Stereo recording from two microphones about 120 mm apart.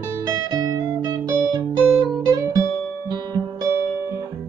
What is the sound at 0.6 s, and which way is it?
Music, 35° right (ahead or behind).